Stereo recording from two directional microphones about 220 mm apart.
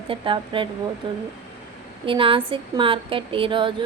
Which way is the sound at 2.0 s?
25° right (ahead or behind).